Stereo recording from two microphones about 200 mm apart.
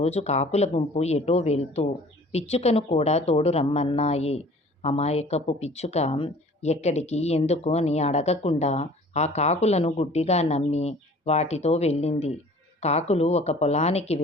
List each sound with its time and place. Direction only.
0.0 s speech: 30° left (ahead or behind)